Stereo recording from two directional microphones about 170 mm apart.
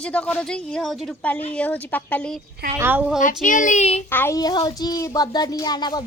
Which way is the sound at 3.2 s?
50° left (ahead or behind).